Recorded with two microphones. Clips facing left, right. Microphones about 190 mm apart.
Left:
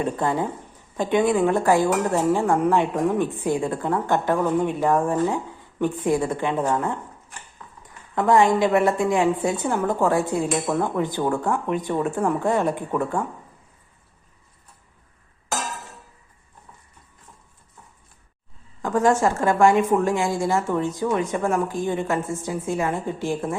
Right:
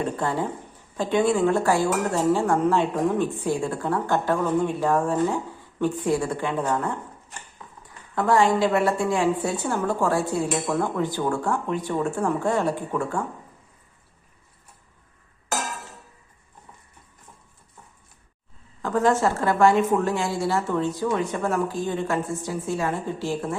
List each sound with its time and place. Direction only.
0.9 s a woman's voice: 15° left (ahead or behind)
8.1 s a woman's voice: 20° left (ahead or behind)
18.8 s a woman's voice: 15° left (ahead or behind)